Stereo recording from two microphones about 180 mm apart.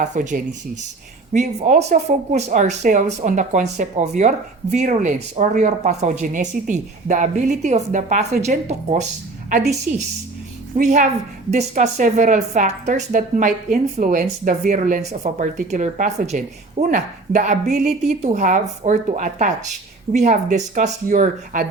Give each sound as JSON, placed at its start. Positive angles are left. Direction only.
{"t": 0.0, "sound": "speech", "side_deg": -45}
{"t": 10.8, "sound": "speech", "side_deg": -40}